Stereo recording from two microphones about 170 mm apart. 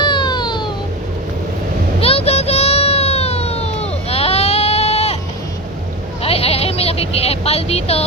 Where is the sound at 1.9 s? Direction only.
35° left (ahead or behind).